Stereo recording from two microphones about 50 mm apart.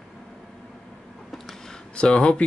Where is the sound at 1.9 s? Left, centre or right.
Centre.